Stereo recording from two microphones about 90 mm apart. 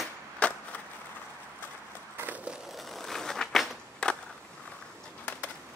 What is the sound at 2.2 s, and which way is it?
Crushing, 20° right (ahead or behind).